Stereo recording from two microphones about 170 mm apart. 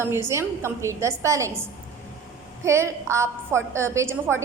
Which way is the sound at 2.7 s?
15° right (ahead or behind).